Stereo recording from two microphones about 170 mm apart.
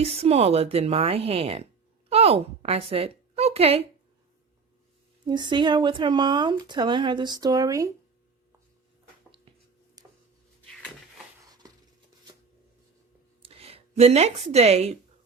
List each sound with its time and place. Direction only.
0.0 s a woman's voice: 35° right (ahead or behind)
5.2 s speech: 25° right (ahead or behind)
10.0 s a sound: 20° right (ahead or behind)
13.4 s speech: 35° right (ahead or behind)